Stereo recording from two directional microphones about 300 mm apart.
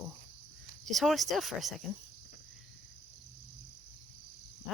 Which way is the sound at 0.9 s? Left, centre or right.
Centre.